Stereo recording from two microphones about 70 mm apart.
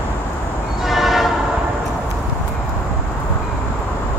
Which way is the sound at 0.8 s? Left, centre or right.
Centre.